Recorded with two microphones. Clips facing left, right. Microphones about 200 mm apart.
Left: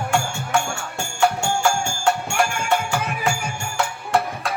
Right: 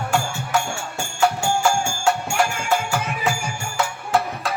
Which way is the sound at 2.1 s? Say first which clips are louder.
Even; centre (ahead or behind).